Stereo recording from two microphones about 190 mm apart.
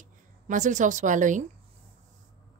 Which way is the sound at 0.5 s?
40° right (ahead or behind).